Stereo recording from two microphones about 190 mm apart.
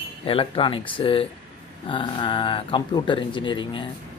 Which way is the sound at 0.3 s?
30° left (ahead or behind).